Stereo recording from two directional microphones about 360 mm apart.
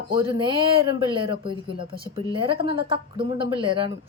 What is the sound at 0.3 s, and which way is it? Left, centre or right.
A woman's voice, centre.